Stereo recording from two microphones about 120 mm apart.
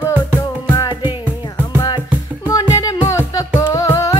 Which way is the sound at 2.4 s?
30° left (ahead or behind).